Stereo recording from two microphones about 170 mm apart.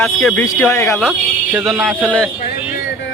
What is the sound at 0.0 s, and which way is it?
Speech, centre (ahead or behind).